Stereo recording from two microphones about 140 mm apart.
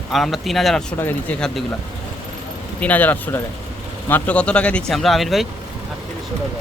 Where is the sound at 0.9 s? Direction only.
15° left (ahead or behind).